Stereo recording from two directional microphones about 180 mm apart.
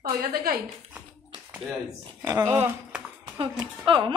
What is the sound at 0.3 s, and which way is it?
Speech, 55° right (ahead or behind).